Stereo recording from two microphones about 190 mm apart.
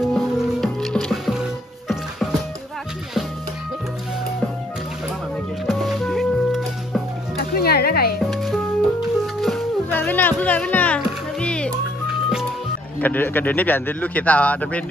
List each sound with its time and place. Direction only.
0.0 s music: centre (ahead or behind)
5.7 s music: centre (ahead or behind)
7.3 s music: 55° left (ahead or behind)
8.2 s music: centre (ahead or behind)
13.0 s speech: 10° left (ahead or behind)